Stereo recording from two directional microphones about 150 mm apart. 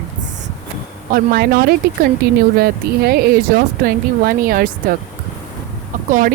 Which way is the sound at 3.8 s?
75° right (ahead or behind).